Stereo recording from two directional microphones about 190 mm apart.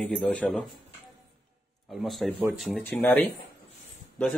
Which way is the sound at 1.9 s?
Centre (ahead or behind).